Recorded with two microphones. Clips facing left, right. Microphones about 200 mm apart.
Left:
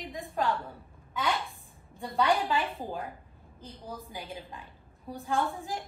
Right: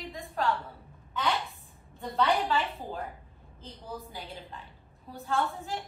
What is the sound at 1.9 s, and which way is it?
A woman's voice, 15° left (ahead or behind).